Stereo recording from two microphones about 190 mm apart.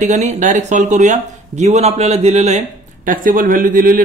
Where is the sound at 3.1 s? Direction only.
45° right (ahead or behind).